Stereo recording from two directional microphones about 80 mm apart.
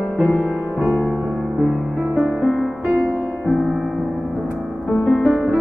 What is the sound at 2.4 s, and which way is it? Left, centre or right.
Music, centre.